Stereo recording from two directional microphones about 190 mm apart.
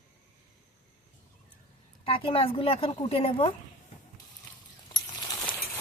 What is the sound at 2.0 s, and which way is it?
A woman's voice, 30° left (ahead or behind).